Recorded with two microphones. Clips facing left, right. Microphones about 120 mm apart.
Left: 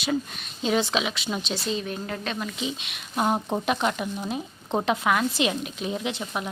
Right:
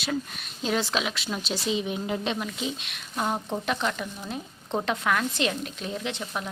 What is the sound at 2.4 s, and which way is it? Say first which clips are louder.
Speech: left 1 dB; centre (ahead or behind).